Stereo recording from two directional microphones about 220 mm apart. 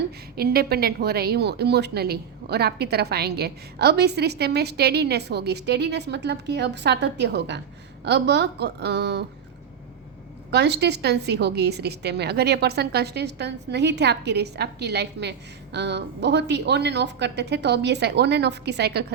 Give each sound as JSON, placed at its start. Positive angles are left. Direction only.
{"t": 0.3, "sound": "a woman's voice", "side_deg": -45}
{"t": 10.5, "sound": "a woman's voice", "side_deg": -50}